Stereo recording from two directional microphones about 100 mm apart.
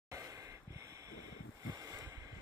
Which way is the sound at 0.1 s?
35° right (ahead or behind).